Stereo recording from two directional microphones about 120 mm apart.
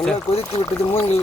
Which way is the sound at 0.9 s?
60° left (ahead or behind).